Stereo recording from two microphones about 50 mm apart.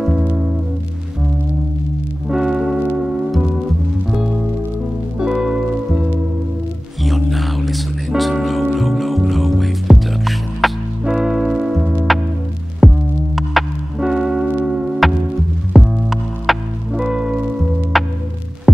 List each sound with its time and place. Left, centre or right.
0.2 s music: right
2.2 s music: centre
4.1 s music: centre
7.0 s music: centre
11.1 s music: centre
12.8 s music: centre
13.9 s music: centre
15.7 s music: centre
16.9 s music: centre
17.9 s music: centre